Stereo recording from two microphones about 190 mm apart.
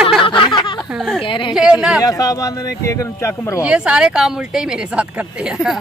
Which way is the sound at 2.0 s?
20° left (ahead or behind).